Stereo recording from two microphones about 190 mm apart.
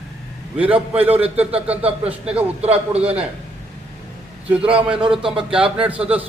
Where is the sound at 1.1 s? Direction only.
10° right (ahead or behind).